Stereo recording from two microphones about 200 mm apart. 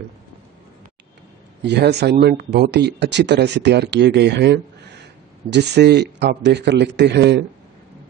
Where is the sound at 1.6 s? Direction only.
60° right (ahead or behind).